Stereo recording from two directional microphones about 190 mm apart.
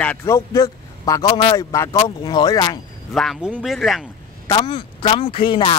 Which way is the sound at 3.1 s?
Centre (ahead or behind).